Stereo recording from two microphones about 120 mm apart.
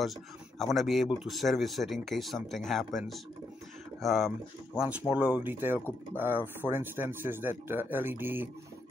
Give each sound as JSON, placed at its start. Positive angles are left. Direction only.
{"t": 0.0, "sound": "speech", "side_deg": 0}
{"t": 5.1, "sound": "speech", "side_deg": -15}